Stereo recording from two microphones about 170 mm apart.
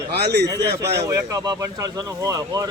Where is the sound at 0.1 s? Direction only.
75° right (ahead or behind).